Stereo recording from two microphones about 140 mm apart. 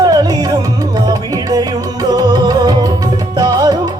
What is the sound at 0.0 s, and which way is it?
Music, 25° right (ahead or behind).